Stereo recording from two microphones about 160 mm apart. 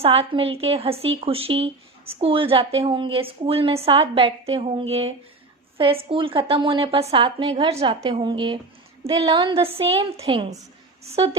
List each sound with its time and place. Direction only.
0.0 s a woman's voice: 35° right (ahead or behind)